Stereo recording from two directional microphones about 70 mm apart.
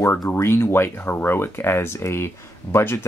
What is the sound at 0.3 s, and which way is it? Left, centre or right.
Speech, left.